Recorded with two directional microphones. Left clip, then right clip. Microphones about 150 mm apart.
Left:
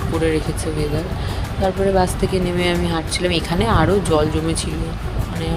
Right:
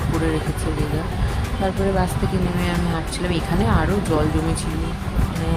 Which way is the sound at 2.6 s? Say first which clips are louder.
Left 5 dB; 45° left (ahead or behind).